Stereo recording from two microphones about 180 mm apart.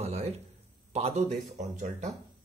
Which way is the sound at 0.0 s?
35° right (ahead or behind).